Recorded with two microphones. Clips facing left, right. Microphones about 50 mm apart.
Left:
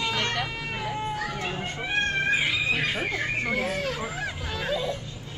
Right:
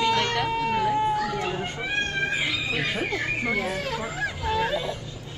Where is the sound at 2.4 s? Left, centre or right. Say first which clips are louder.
Left 1 dB; left.